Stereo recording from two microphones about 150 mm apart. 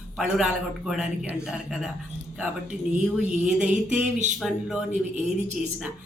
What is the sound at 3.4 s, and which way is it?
Speech, 10° right (ahead or behind).